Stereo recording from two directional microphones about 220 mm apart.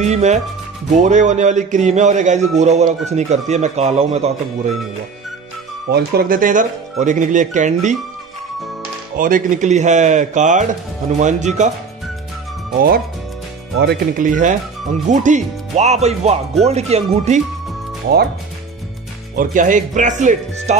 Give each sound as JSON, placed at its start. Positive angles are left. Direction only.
{"t": 0.0, "sound": "a man's voice", "side_deg": -30}
{"t": 5.9, "sound": "a man's voice", "side_deg": -45}
{"t": 9.1, "sound": "a man's voice", "side_deg": -40}
{"t": 13.7, "sound": "a man's voice", "side_deg": -45}
{"t": 19.3, "sound": "a man's voice", "side_deg": -35}